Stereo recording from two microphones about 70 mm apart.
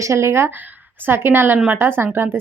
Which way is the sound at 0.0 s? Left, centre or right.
Right.